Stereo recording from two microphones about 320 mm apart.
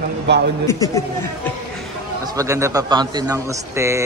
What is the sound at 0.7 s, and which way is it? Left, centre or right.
Speech, centre.